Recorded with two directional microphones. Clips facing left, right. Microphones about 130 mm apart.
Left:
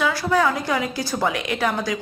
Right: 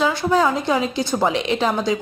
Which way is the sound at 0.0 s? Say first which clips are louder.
Right 2 dB; 25° right (ahead or behind).